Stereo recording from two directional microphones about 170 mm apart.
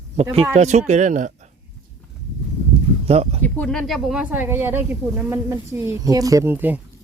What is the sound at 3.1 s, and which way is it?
Speech, 35° right (ahead or behind).